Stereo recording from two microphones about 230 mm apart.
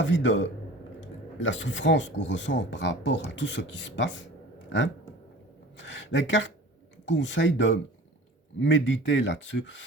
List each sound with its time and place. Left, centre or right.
0.0 s speech: left
5.7 s speech: left